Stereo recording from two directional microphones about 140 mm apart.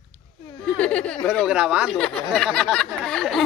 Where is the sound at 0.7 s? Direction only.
10° left (ahead or behind).